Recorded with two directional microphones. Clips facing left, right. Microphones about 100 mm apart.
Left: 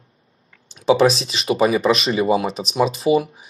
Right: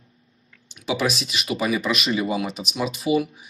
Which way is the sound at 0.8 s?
35° left (ahead or behind).